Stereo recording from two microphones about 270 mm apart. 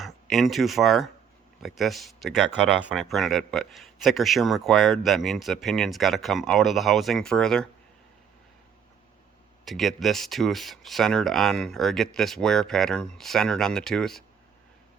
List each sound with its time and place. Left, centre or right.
0.0 s speech: centre
9.6 s speech: centre